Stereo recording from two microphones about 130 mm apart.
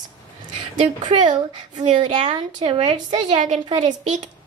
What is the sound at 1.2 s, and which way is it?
Speech, 65° right (ahead or behind).